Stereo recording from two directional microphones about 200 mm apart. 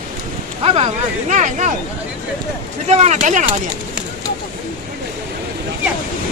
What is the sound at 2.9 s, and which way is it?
Speech, 35° right (ahead or behind).